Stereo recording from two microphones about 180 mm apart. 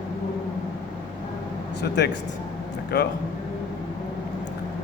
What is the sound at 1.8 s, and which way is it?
Speech, 70° left (ahead or behind).